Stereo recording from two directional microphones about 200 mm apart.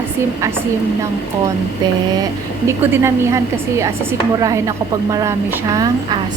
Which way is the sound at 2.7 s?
15° right (ahead or behind).